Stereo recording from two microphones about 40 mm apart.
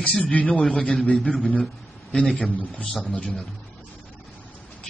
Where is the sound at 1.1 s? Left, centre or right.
Centre.